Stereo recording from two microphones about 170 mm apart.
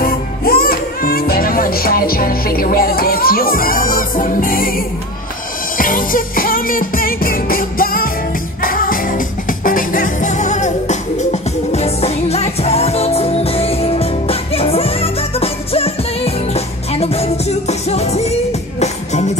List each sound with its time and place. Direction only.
0.0 s music: 60° left (ahead or behind); by 19.3 s 45° left (ahead or behind)